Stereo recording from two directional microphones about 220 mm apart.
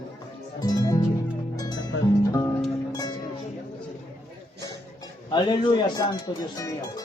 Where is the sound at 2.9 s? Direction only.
15° left (ahead or behind).